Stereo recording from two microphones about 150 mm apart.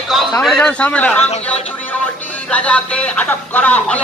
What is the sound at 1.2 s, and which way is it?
Speech, 45° left (ahead or behind).